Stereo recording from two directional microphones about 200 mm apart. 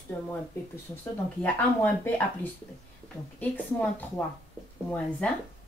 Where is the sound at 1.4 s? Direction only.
10° left (ahead or behind).